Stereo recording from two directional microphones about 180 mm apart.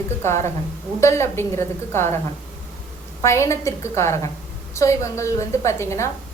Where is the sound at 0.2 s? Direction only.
15° left (ahead or behind).